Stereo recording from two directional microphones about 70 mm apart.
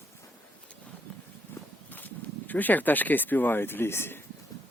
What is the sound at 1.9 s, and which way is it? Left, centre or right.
Speech, left.